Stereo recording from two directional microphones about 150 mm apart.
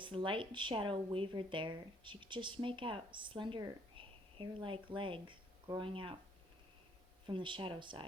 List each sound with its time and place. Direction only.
0.0 s speech: 35° right (ahead or behind)
7.3 s speech: 35° right (ahead or behind)